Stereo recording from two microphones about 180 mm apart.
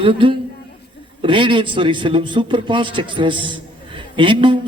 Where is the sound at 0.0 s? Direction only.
30° right (ahead or behind).